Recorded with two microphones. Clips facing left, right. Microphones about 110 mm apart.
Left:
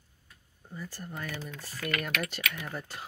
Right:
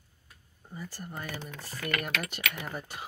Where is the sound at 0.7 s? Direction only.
10° right (ahead or behind).